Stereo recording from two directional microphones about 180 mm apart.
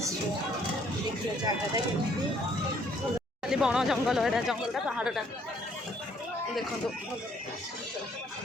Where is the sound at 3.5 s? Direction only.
5° right (ahead or behind).